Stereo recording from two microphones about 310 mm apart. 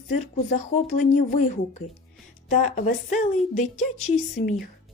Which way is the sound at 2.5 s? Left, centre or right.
Left.